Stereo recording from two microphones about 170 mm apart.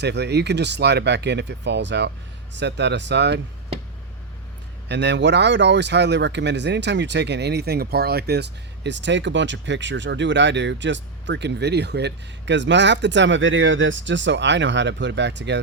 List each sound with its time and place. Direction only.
0.0 s speech: 80° right
4.9 s speech: 90° right